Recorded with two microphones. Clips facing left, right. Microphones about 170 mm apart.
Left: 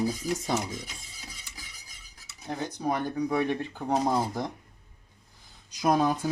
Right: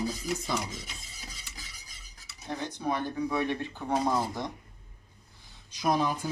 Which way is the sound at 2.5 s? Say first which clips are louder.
Left 2 dB; 40° left (ahead or behind).